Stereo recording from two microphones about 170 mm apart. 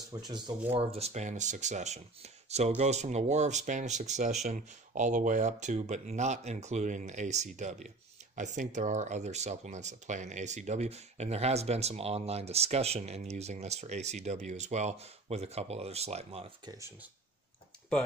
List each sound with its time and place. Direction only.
0.1 s speech: 25° right (ahead or behind)